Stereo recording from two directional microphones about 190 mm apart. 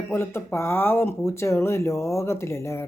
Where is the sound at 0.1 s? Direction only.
15° left (ahead or behind).